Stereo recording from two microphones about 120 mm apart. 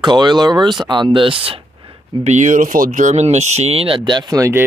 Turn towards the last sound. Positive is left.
turn(degrees=-25)  # may be behind; listen again after turning